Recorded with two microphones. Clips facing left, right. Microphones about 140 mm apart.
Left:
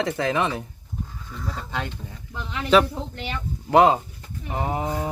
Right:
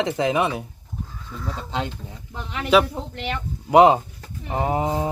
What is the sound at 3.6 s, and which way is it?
Speech, 20° right (ahead or behind).